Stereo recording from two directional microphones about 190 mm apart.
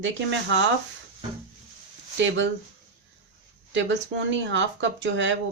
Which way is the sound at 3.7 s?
75° right (ahead or behind).